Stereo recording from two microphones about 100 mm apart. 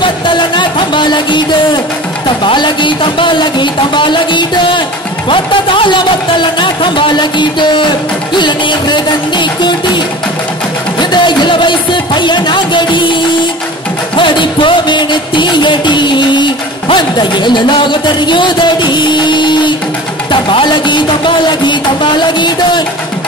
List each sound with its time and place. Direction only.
0.0 s music: 55° left (ahead or behind)
5.3 s speech: 60° left (ahead or behind)
6.6 s music: 55° left (ahead or behind)
11.0 s speech: 50° left (ahead or behind)
14.1 s music: 55° left (ahead or behind)